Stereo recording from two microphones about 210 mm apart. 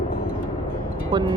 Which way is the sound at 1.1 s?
20° right (ahead or behind).